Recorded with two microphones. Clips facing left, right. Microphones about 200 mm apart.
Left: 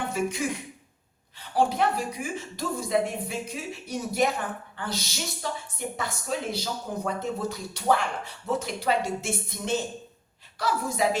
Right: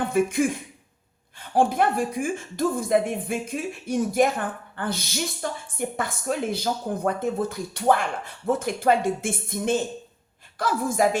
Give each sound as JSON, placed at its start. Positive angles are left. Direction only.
{"t": 0.1, "sound": "a woman's voice", "side_deg": -50}